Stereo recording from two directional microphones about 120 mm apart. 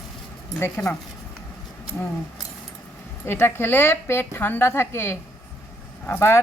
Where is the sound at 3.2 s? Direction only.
20° left (ahead or behind).